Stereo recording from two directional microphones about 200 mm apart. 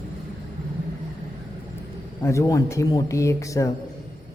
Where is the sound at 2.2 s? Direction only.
15° left (ahead or behind).